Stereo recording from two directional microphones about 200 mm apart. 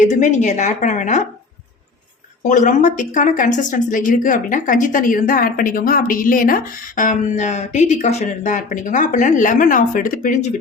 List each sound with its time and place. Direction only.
0.0 s a woman's voice: 35° left (ahead or behind)
2.5 s a woman's voice: 40° left (ahead or behind)